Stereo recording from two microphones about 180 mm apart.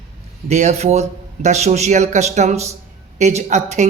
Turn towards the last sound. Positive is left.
turn(degrees=-40)  # may be behind; listen again after turning